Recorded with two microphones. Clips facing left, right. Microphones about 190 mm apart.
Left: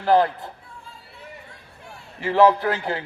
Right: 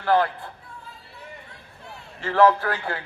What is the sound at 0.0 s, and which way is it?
Speech, 25° left (ahead or behind).